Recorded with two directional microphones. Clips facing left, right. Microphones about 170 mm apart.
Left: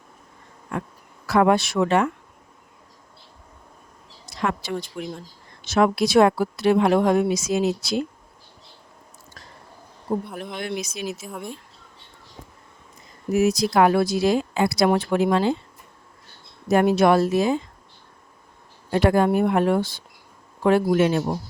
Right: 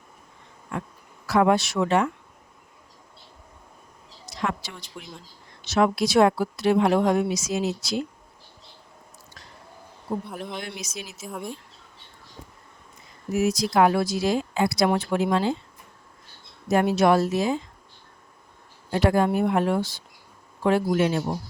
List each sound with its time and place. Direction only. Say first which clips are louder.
0.7 s insect: left 3 dB; 55° left (ahead or behind)
1.3 s speech: left 2 dB; 55° left (ahead or behind)
4.4 s a woman's voice: left 4 dB; 55° left (ahead or behind)
10.2 s speech: left 1 dB; centre (ahead or behind)
10.6 s speech: left 7 dB; 55° left (ahead or behind)
11.3 s speech: even; centre (ahead or behind)
13.3 s speech: left 3 dB; 65° left (ahead or behind)
16.6 s speech: left 2 dB; 55° left (ahead or behind)
18.9 s speech: left 3 dB; 60° left (ahead or behind)